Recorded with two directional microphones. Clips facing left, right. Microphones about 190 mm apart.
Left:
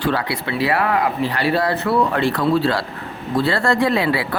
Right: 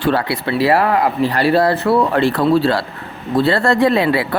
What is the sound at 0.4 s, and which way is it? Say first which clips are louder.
Speech: right 6 dB; 35° right (ahead or behind).